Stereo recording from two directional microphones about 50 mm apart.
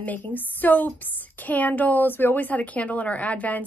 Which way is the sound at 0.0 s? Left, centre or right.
Left.